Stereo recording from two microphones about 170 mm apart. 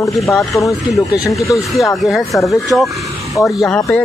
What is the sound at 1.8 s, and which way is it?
Speech, centre (ahead or behind).